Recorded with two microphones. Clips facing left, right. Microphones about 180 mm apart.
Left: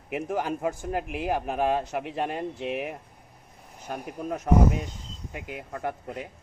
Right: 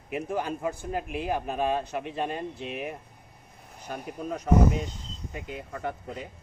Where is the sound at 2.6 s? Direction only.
65° left (ahead or behind).